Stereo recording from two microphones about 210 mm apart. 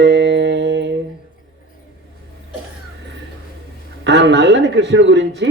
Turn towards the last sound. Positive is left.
turn(degrees=-60)  # may be behind; listen again after turning